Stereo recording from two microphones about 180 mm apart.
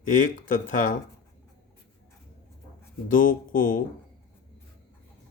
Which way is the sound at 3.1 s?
45° left (ahead or behind).